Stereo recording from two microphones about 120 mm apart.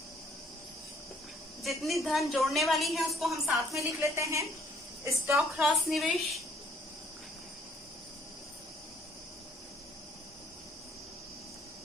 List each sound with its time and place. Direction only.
1.6 s a woman's voice: centre (ahead or behind)
3.8 s a woman's voice: 25° right (ahead or behind)
5.4 s a woman's voice: centre (ahead or behind)